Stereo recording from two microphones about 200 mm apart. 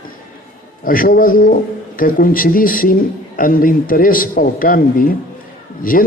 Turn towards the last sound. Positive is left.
turn(degrees=45)  # may be behind; listen again after turning